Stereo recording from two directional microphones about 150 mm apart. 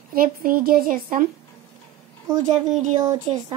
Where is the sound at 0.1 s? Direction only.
75° right (ahead or behind).